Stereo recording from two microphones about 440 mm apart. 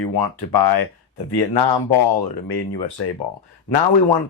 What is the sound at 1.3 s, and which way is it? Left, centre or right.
Speech, left.